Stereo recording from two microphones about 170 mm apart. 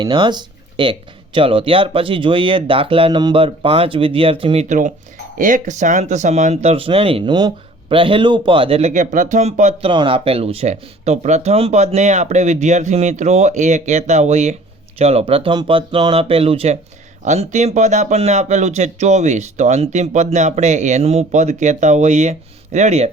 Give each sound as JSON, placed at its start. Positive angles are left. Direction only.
{"t": 0.0, "sound": "speech", "side_deg": -30}
{"t": 5.4, "sound": "speech", "side_deg": -50}
{"t": 8.9, "sound": "speech", "side_deg": -50}
{"t": 9.9, "sound": "speech", "side_deg": -30}